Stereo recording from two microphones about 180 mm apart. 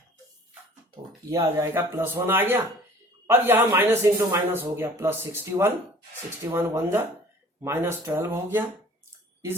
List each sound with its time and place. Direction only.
1.3 s speech: 15° right (ahead or behind)